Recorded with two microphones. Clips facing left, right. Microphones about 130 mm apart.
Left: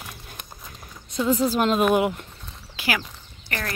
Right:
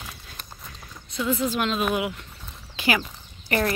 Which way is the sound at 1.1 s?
35° left (ahead or behind).